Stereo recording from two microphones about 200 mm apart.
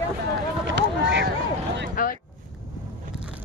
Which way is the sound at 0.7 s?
65° right (ahead or behind).